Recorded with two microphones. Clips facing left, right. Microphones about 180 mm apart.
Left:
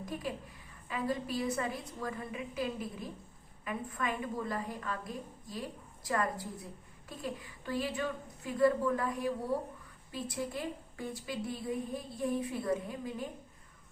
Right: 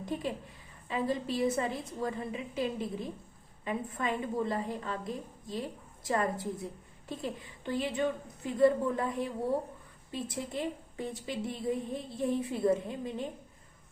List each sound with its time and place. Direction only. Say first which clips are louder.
0.0 s a woman's voice: right 4 dB; 25° right (ahead or behind)